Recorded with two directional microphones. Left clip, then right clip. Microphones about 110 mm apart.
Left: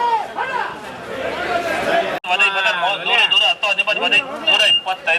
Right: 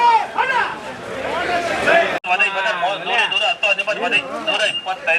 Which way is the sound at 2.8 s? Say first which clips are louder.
Left 4 dB; 55° left (ahead or behind).